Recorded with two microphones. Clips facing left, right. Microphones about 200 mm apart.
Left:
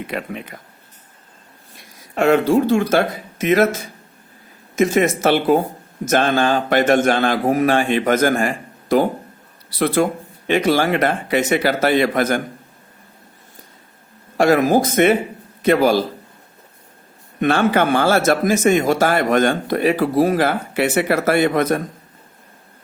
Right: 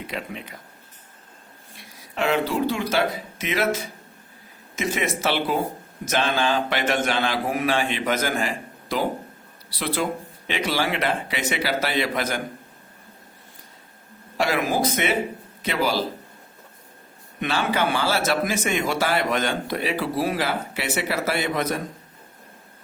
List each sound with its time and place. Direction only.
0.1 s speech: 55° left (ahead or behind)
2.1 s speech: 50° left (ahead or behind)
14.3 s speech: 50° left (ahead or behind)
17.4 s speech: 50° left (ahead or behind)